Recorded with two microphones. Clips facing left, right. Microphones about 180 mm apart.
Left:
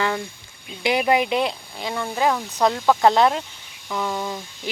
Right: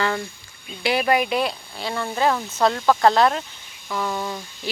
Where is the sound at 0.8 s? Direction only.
20° left (ahead or behind).